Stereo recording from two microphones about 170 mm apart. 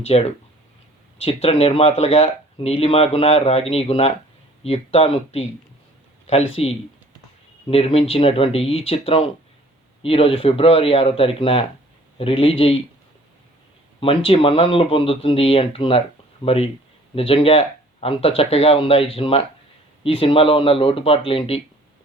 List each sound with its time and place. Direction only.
0.0 s speech: 40° left (ahead or behind)
14.0 s speech: 35° left (ahead or behind)